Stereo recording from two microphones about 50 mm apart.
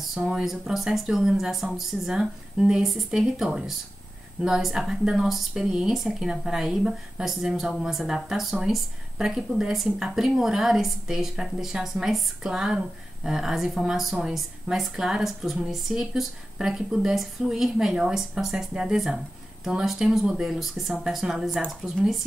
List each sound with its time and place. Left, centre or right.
0.0 s a woman's voice: centre